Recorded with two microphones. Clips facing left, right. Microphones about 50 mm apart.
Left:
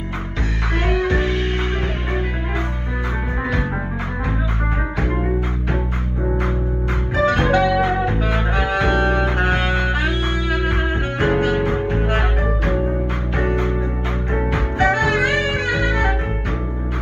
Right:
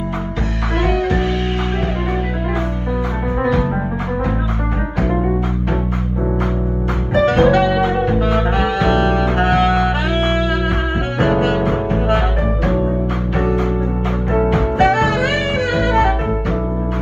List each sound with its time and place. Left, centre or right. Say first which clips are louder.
0.9 s music: right 2 dB; left
7.3 s music: right 7 dB; left
7.6 s music: right 2 dB; right
11.4 s music: right 2 dB; right
15.0 s music: right 1 dB; left